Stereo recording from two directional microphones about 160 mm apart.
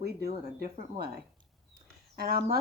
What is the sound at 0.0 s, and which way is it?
A woman's voice, 75° right (ahead or behind).